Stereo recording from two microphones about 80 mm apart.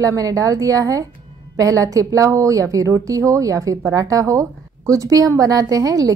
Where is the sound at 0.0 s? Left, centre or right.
Right.